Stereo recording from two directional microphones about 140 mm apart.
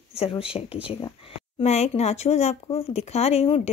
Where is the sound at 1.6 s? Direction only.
50° left (ahead or behind).